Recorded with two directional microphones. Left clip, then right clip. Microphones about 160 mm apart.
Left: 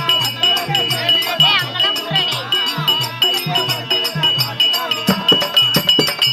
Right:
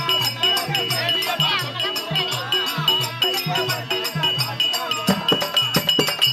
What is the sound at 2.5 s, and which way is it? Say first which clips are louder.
Music: left 2 dB; centre (ahead or behind).